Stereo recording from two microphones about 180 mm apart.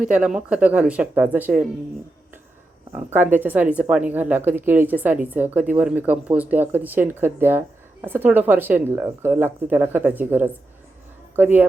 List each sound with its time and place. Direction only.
0.0 s speech: 5° right (ahead or behind)
2.9 s speech: 10° right (ahead or behind)